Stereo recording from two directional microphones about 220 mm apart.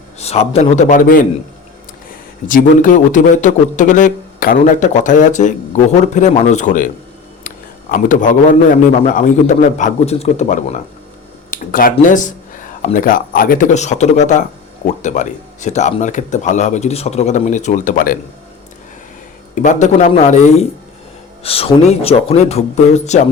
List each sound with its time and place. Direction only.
0.2 s a man's voice: 30° left (ahead or behind)
2.5 s a man's voice: 35° left (ahead or behind)
19.6 s a man's voice: 35° left (ahead or behind)